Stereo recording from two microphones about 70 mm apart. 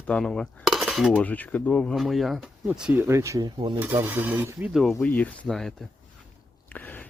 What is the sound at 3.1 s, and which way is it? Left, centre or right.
Speech, right.